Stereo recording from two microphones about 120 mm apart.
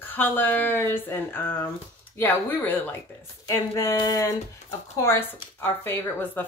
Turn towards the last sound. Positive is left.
turn(degrees=15)  # may be behind; listen again after turning